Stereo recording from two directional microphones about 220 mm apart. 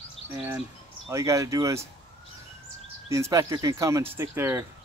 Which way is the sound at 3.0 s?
15° right (ahead or behind).